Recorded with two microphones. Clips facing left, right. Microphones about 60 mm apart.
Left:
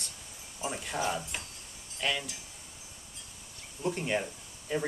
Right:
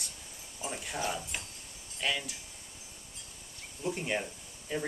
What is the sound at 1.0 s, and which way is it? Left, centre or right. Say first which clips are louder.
Speech: left 3 dB; centre.